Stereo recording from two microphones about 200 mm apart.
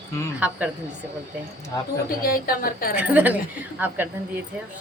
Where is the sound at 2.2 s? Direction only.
45° left (ahead or behind).